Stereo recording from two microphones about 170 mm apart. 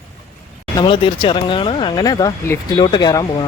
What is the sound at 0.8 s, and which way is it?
Speech, 30° left (ahead or behind).